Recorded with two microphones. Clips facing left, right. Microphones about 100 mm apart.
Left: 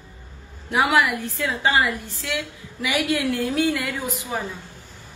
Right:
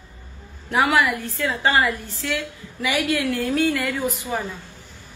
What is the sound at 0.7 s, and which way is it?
Speech, 10° left (ahead or behind).